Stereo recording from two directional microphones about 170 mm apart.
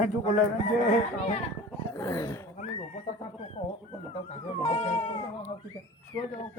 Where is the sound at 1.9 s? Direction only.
20° left (ahead or behind).